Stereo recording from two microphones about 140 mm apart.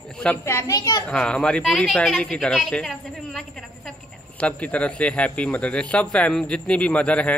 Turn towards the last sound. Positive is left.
turn(degrees=10)  # may be behind; listen again after turning